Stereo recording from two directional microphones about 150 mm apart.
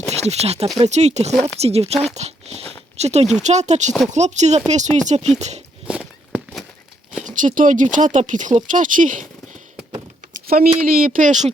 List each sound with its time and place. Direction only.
0.1 s speech: 45° right (ahead or behind)
5.9 s walk: 5° right (ahead or behind)
7.3 s speech: 60° right (ahead or behind)
10.4 s speech: 80° right; by 11.5 s 55° right (ahead or behind)